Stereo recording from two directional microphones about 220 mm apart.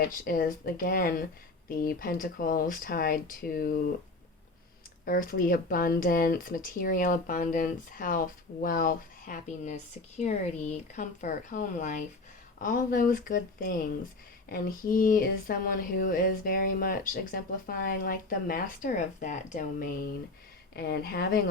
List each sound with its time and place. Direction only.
0.3 s speech: 40° left (ahead or behind)
5.0 s speech: 40° left (ahead or behind)
20.7 s speech: 45° left (ahead or behind)